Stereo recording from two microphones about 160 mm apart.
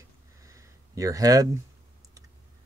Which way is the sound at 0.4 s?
20° right (ahead or behind).